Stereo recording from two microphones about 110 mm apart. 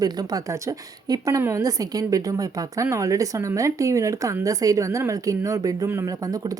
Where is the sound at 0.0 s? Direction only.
35° right (ahead or behind).